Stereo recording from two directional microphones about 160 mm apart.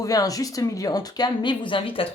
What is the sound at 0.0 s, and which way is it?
Speech, 20° left (ahead or behind).